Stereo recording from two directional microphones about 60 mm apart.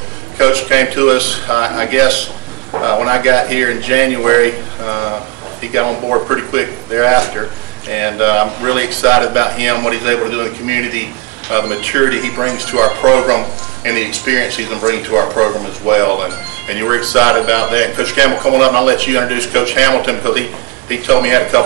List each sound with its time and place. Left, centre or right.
0.4 s speech: right
6.0 s speech: right